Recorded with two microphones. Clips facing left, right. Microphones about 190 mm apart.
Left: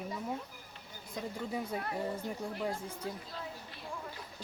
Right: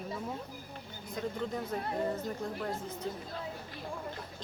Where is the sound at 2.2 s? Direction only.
10° left (ahead or behind).